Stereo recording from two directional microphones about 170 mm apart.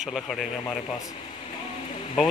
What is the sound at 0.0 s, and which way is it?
Speech, centre (ahead or behind).